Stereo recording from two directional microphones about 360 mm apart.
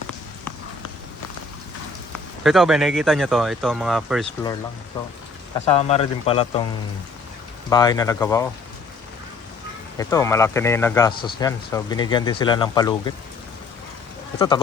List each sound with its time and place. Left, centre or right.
2.4 s speech: centre
4.9 s speech: centre
7.7 s speech: centre
10.0 s speech: centre
14.3 s speech: centre